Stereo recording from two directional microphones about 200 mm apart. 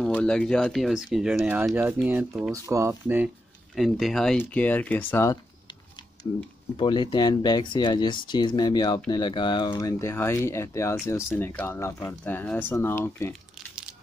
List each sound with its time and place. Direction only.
0.0 s speech: 5° left (ahead or behind); by 3.3 s 10° right (ahead or behind)
3.7 s speech: centre (ahead or behind)